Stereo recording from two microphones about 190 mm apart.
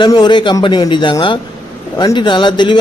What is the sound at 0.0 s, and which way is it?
A man's voice, 25° left (ahead or behind).